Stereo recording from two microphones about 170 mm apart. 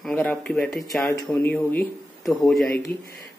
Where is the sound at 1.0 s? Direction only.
20° left (ahead or behind).